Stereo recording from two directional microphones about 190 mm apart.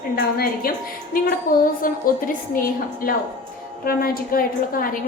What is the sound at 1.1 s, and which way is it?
A woman's voice, 50° left (ahead or behind).